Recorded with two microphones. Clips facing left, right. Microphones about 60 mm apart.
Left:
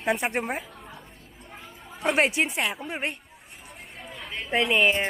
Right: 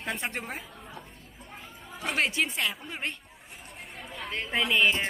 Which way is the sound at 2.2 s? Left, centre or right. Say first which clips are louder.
Left 3 dB; left.